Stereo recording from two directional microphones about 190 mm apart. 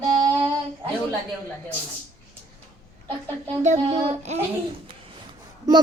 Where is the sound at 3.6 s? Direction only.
35° right (ahead or behind).